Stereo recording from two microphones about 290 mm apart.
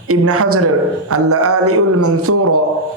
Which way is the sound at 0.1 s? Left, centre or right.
Right.